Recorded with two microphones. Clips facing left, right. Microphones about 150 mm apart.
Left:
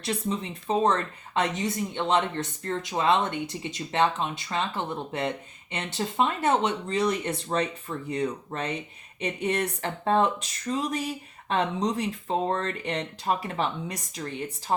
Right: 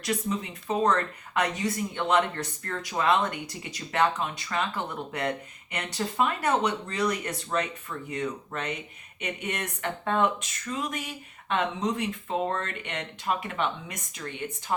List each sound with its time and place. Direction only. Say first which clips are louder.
0.0 s speech: even; 30° left (ahead or behind)